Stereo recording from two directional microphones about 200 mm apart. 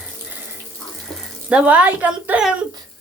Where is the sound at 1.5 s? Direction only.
5° right (ahead or behind).